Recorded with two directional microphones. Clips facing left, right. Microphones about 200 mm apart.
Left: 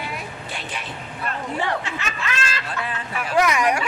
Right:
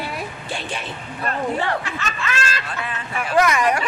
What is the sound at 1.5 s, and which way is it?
Speech, 15° left (ahead or behind).